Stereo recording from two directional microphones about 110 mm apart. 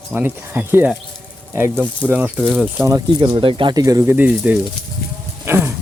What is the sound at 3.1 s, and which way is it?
Speech, 40° right (ahead or behind).